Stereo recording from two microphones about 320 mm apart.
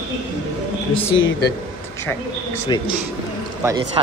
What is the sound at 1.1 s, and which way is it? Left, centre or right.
Speech, left.